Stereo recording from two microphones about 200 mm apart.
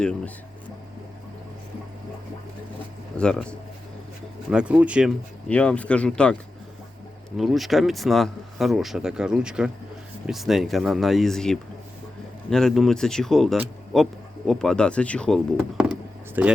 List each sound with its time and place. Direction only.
3.2 s speech: 5° left (ahead or behind)
4.4 s speech: 5° right (ahead or behind)
5.5 s speech: 5° left (ahead or behind)
7.3 s speech: centre (ahead or behind)
15.8 s a sound: 5° right (ahead or behind)